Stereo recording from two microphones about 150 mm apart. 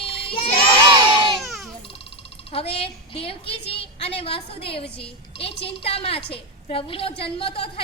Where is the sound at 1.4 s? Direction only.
Centre (ahead or behind).